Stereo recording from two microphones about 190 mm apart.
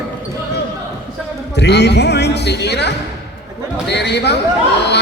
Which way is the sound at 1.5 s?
65° left (ahead or behind).